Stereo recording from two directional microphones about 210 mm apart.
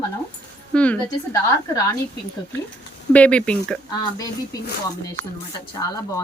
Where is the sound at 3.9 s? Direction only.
20° left (ahead or behind).